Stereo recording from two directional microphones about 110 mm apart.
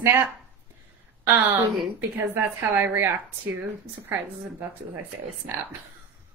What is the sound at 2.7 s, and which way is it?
Speech, 20° right (ahead or behind).